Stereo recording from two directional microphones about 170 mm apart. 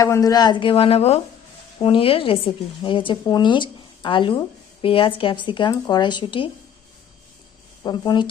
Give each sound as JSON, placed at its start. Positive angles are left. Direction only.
{"t": 0.0, "sound": "speech", "side_deg": 20}
{"t": 7.9, "sound": "speech", "side_deg": 25}